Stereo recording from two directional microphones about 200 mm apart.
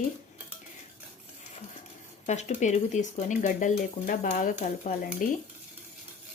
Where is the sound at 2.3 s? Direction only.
35° left (ahead or behind).